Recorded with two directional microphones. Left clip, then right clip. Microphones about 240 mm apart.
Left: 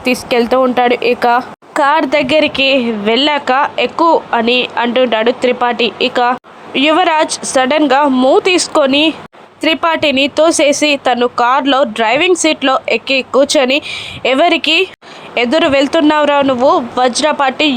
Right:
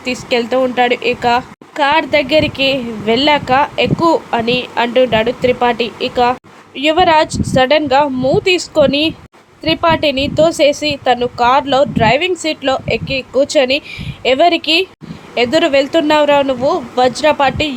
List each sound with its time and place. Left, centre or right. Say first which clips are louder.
0.0 s speech: left 4 dB; centre